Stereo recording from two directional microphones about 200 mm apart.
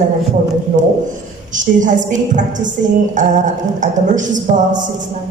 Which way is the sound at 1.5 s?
40° right (ahead or behind).